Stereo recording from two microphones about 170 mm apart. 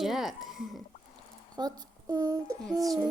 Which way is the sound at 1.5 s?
25° right (ahead or behind).